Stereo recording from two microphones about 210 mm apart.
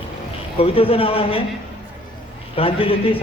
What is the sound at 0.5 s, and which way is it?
Speech, 25° left (ahead or behind).